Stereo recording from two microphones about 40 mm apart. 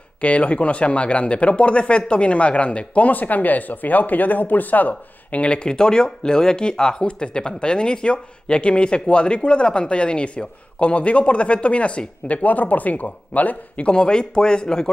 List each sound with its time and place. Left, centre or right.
0.2 s speech: left
5.4 s speech: left
12.4 s speech: left
13.8 s speech: left